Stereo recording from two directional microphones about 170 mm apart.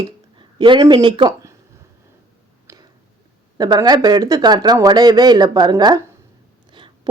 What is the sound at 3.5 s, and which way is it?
A woman's voice, 25° right (ahead or behind).